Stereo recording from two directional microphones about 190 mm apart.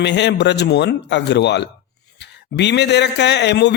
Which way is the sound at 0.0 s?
65° left (ahead or behind).